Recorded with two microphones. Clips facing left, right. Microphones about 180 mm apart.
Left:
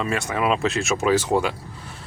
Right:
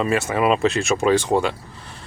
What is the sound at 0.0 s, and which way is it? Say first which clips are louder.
Speech: right 4 dB; 5° right (ahead or behind).